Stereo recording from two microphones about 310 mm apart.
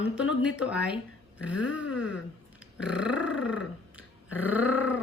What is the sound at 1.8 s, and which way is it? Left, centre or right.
Speech, left.